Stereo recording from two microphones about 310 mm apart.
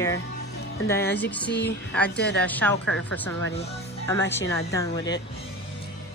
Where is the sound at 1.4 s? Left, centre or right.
Left.